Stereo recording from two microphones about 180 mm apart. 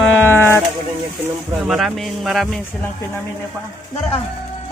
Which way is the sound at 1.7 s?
Centre (ahead or behind).